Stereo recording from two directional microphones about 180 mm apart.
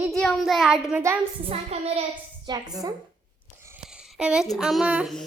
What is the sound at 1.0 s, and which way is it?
Speech, 15° right (ahead or behind).